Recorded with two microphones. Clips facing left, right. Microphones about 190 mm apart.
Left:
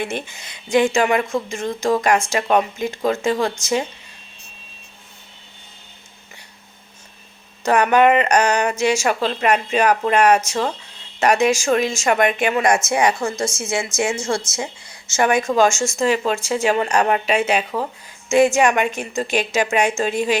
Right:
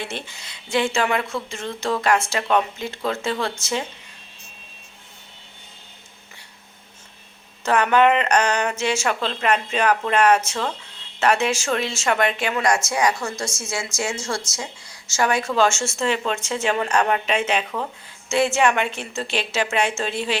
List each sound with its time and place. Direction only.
0.3 s a woman's voice: 20° left (ahead or behind)
1.2 s speech: 45° left (ahead or behind)
1.5 s a woman's voice: 15° left (ahead or behind)
7.6 s a woman's voice: 15° left (ahead or behind)